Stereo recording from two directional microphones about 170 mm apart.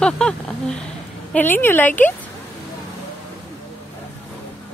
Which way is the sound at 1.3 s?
10° left (ahead or behind).